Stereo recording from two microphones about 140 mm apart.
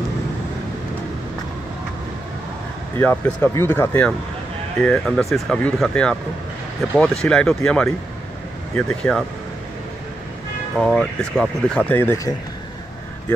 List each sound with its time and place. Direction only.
3.0 s speech: 10° left (ahead or behind)
10.8 s speech: 5° left (ahead or behind)